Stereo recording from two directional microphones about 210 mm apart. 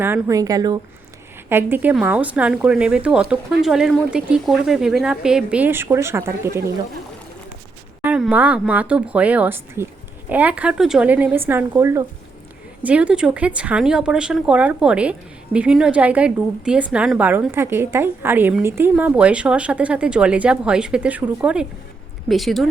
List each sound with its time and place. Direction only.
0.0 s a woman's voice: 15° right (ahead or behind)
8.0 s a woman's voice: 5° right (ahead or behind)